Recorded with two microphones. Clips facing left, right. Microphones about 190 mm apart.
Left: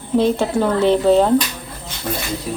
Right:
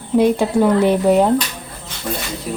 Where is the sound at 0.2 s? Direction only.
10° right (ahead or behind).